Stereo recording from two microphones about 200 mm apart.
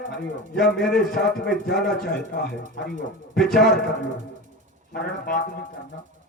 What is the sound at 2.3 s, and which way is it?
Speech, 50° left (ahead or behind).